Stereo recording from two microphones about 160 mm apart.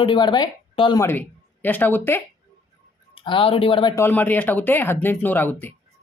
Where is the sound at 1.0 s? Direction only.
10° left (ahead or behind).